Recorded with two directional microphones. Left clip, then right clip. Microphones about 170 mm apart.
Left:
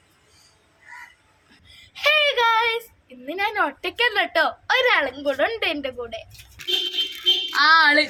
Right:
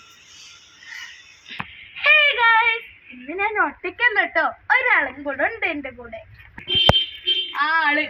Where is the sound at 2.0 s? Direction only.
40° left (ahead or behind).